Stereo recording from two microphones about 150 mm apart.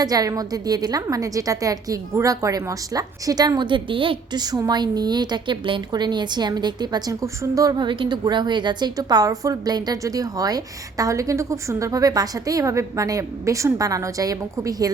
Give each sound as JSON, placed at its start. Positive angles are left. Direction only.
{"t": 0.0, "sound": "a woman's voice", "side_deg": -25}